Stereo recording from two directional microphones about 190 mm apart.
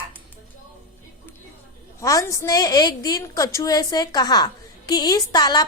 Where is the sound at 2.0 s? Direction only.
15° left (ahead or behind).